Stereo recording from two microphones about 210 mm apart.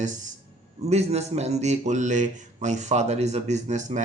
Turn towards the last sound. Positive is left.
turn(degrees=-35)  # may be behind; listen again after turning